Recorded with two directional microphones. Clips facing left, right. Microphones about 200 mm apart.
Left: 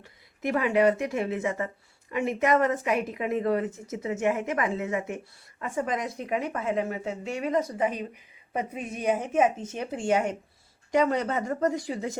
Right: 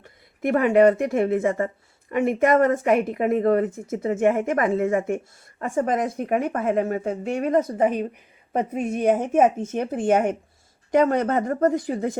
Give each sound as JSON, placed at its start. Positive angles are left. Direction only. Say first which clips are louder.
{"t": 0.0, "sound": "speech", "louder": "right 5 dB", "side_deg": -50}